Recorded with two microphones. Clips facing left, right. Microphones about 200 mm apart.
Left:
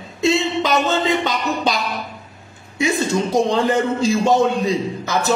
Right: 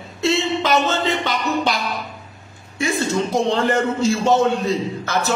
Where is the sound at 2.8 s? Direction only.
15° left (ahead or behind).